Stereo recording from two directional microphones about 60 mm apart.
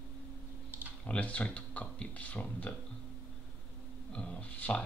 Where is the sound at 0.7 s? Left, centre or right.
Right.